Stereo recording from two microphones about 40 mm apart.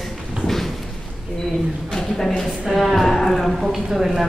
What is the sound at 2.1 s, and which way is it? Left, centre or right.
A woman's voice, centre.